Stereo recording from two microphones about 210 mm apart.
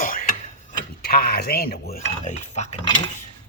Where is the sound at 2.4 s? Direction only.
35° left (ahead or behind).